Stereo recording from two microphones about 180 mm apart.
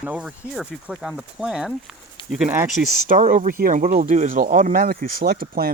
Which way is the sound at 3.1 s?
45° right (ahead or behind).